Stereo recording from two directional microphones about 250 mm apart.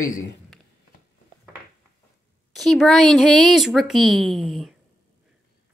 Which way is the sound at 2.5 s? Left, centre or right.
Centre.